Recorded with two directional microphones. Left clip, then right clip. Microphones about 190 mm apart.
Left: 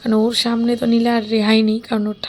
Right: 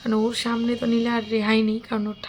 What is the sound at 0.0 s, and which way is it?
A woman's voice, 25° left (ahead or behind).